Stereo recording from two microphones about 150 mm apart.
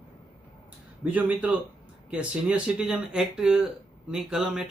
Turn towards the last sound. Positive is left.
turn(degrees=-5)  # may be behind; listen again after turning